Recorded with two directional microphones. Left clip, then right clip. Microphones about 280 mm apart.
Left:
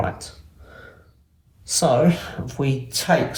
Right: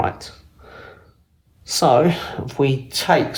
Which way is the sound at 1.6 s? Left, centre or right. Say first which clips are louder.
Right 3 dB; right.